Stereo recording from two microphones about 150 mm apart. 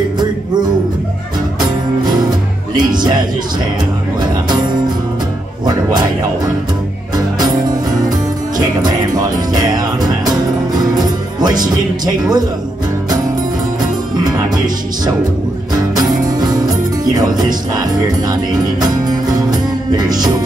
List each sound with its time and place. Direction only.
2.8 s music: 30° right (ahead or behind)
4.2 s music: 30° right (ahead or behind)
7.2 s music: 25° right (ahead or behind)
8.5 s music: 25° right (ahead or behind)
11.6 s speech: 25° right (ahead or behind)
15.7 s music: 25° right (ahead or behind)